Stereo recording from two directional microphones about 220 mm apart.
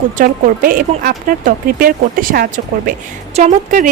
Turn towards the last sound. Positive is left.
turn(degrees=-35)  # may be behind; listen again after turning